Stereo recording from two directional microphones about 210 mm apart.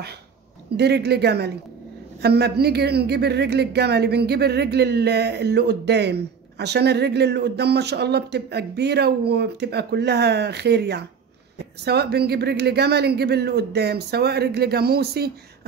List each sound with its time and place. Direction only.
0.7 s a woman's voice: 50° right (ahead or behind)